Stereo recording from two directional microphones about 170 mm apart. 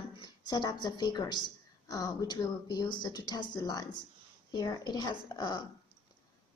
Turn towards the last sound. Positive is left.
turn(degrees=25)  # may be behind; listen again after turning